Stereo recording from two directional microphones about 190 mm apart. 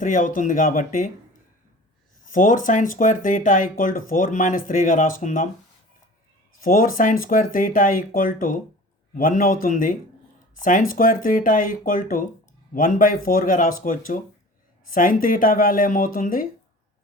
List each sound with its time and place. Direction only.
0.0 s speech: 45° left (ahead or behind)
2.3 s speech: 45° left (ahead or behind)
6.6 s speech: 50° left (ahead or behind)